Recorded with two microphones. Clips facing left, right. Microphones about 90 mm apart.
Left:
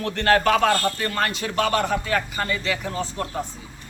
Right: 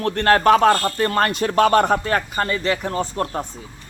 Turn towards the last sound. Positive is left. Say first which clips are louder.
# right 4 dB
turn(degrees=-50)  # may be behind; listen again after turning